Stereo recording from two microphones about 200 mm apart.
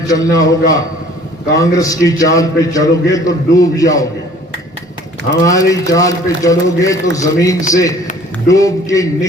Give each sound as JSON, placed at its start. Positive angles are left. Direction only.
{"t": 0.1, "sound": "a man's voice", "side_deg": 15}
{"t": 5.5, "sound": "a man's voice", "side_deg": 15}